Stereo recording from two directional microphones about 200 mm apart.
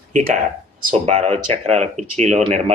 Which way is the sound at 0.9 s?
35° right (ahead or behind).